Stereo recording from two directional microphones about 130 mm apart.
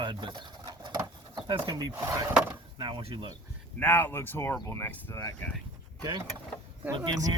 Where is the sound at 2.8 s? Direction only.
40° right (ahead or behind).